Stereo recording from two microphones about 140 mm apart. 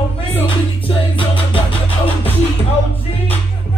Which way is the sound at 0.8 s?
40° left (ahead or behind).